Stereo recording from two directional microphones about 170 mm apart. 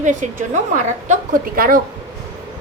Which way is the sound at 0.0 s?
45° right (ahead or behind).